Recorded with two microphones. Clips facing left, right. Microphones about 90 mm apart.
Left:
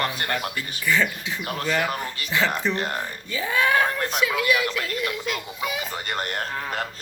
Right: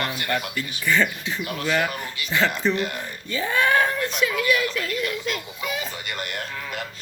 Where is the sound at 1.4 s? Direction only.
40° left (ahead or behind).